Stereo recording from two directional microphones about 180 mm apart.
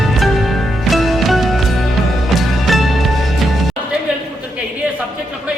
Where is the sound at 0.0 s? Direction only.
Centre (ahead or behind).